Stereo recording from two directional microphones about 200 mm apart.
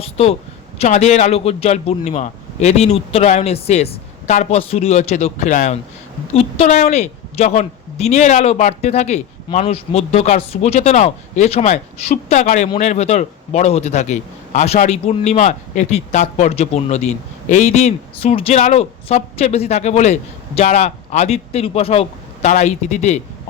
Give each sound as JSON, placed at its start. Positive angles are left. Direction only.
{"t": 0.0, "sound": "a man's voice", "side_deg": 30}